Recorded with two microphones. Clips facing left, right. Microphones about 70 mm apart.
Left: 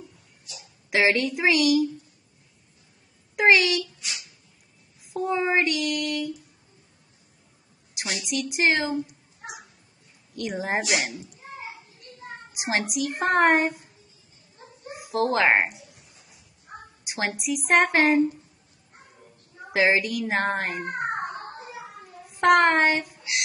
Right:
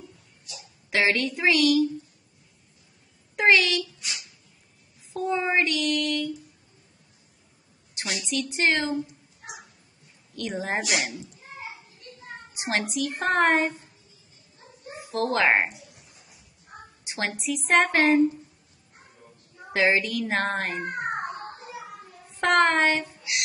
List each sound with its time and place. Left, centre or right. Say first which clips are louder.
0.8 s child singing: left 2 dB; centre
3.3 s a child's voice: left 1 dB; centre
5.1 s child singing: left 1 dB; centre
7.9 s a sound: even; centre
8.3 s child singing: left 1 dB; centre
10.3 s a woman's voice: left 1 dB; centre
12.5 s speech: left 1 dB; centre
13.2 s child singing: left 2 dB; centre
15.0 s speech: left 2 dB; centre
17.0 s a sound: left 1 dB; centre
17.4 s child singing: left 1 dB; centre
19.7 s child singing: left 1 dB; centre
21.1 s a sound: left 1 dB; left
22.3 s child singing: left 3 dB; centre